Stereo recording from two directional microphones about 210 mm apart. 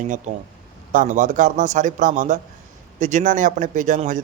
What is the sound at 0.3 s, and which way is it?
A man's voice, 35° right (ahead or behind).